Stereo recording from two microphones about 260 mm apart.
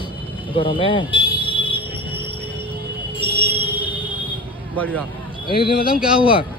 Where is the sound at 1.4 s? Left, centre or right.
Centre.